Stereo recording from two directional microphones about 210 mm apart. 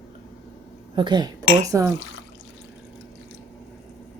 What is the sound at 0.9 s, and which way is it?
Speech, 20° right (ahead or behind).